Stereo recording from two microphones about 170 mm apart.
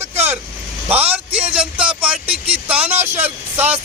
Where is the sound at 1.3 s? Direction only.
10° right (ahead or behind).